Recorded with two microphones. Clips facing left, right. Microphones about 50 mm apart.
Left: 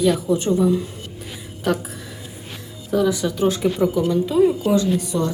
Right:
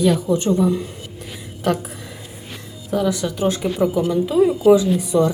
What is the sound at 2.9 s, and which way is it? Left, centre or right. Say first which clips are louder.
A woman's voice: left 1 dB; centre.